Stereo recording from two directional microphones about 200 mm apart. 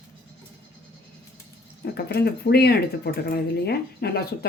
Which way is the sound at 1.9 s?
55° left (ahead or behind).